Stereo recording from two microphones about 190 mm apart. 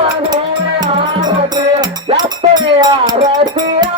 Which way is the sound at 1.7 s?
25° right (ahead or behind).